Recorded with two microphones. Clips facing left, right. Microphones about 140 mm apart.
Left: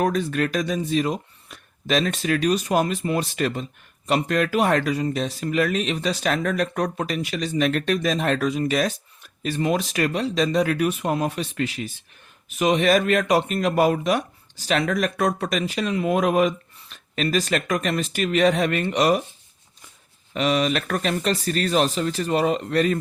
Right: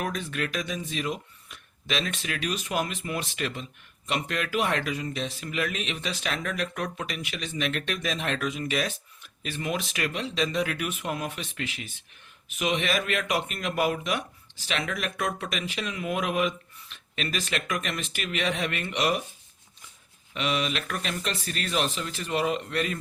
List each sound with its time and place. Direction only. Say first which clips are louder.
0.0 s speech: left 9 dB; 40° left (ahead or behind)
20.3 s speech: left 7 dB; 40° left (ahead or behind)